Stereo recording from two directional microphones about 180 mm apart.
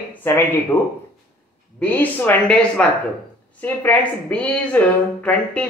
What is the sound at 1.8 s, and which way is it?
A woman's voice, 10° left (ahead or behind).